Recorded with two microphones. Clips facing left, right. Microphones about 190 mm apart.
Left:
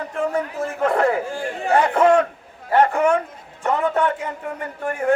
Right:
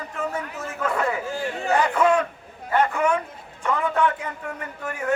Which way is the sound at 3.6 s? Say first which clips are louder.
Left 3 dB; 45° left (ahead or behind).